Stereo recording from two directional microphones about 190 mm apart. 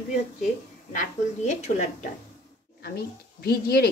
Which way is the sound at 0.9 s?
40° left (ahead or behind).